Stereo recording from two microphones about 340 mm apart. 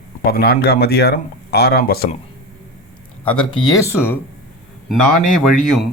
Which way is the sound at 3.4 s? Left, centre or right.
Centre.